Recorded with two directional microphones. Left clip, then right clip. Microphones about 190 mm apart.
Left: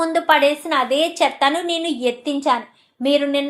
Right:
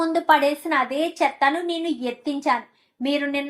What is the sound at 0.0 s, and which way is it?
Speech, 20° left (ahead or behind).